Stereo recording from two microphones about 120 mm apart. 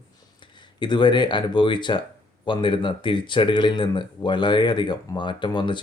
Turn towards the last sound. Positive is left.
turn(degrees=40)  # may be behind; listen again after turning